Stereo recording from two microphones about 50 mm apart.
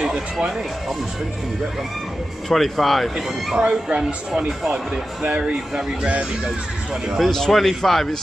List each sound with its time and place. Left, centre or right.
0.0 s music: right
2.5 s speech: centre
3.5 s speech: centre
7.2 s speech: centre